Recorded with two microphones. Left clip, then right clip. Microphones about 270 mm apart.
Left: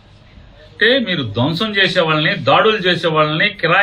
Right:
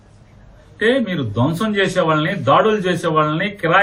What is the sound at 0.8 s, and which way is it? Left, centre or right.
Speech, centre.